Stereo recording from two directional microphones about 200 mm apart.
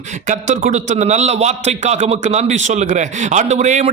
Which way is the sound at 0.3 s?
40° right (ahead or behind).